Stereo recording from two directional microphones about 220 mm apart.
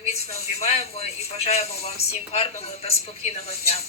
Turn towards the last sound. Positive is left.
turn(degrees=30)  # may be behind; listen again after turning